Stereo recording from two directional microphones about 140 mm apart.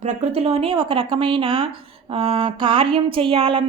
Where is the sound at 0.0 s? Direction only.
50° right (ahead or behind).